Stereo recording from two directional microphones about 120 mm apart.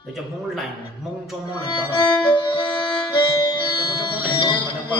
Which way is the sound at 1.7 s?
40° left (ahead or behind).